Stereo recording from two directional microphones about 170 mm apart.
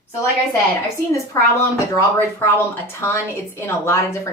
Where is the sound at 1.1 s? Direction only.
20° left (ahead or behind).